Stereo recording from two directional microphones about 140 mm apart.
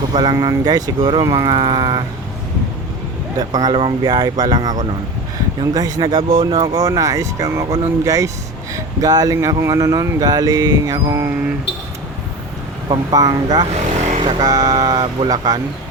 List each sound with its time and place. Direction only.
0.1 s speech: 30° right (ahead or behind)
3.3 s speech: 30° right (ahead or behind)
12.9 s speech: 30° right (ahead or behind)
14.0 s vehicle: 60° right (ahead or behind)
14.3 s speech: 30° right (ahead or behind)